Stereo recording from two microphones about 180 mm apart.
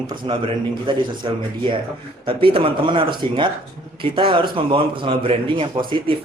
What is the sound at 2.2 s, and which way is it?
A man's voice, 30° right (ahead or behind).